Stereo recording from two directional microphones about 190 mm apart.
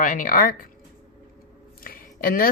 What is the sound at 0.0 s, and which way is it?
Speech, 45° left (ahead or behind).